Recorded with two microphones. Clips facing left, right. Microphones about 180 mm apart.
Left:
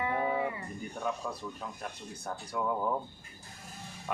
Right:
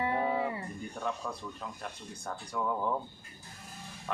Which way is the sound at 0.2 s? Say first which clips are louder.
Even; 20° left (ahead or behind).